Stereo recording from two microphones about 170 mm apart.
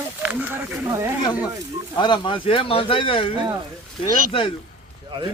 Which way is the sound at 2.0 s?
25° left (ahead or behind).